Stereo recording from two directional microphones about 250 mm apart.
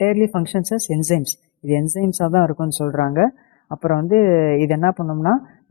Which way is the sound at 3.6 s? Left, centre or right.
Left.